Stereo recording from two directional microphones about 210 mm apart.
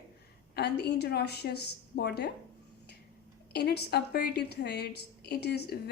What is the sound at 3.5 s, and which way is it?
A woman's voice, 50° left (ahead or behind).